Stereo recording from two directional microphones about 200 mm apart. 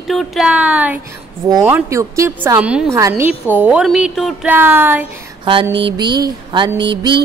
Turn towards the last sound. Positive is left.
turn(degrees=-25)  # may be behind; listen again after turning